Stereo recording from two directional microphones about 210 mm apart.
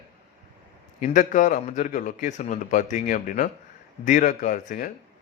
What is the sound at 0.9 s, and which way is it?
Speech, 35° left (ahead or behind).